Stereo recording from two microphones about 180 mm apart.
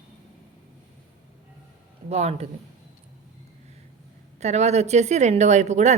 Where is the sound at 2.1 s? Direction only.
35° right (ahead or behind).